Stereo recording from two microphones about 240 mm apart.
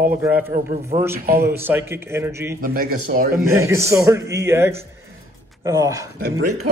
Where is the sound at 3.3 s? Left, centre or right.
Centre.